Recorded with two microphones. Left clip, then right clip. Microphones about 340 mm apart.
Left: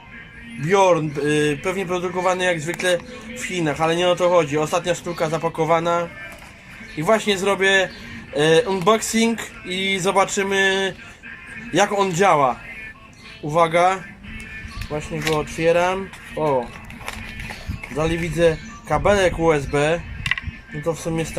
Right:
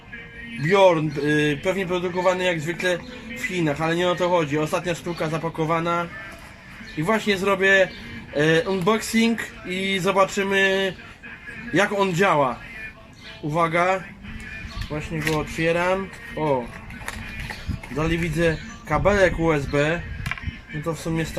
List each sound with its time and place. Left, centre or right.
0.7 s speech: centre
13.5 s speech: centre
16.4 s speech: left
17.9 s speech: centre